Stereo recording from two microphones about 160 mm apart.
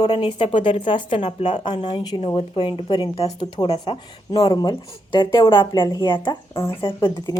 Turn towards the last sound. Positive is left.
turn(degrees=25)  # may be behind; listen again after turning